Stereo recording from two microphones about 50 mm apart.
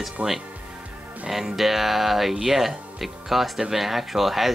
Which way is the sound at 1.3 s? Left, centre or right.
Centre.